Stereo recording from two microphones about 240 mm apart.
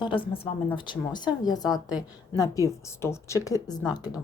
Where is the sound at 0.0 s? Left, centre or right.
Left.